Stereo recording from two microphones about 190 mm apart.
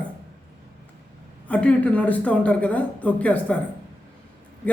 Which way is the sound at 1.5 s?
5° left (ahead or behind).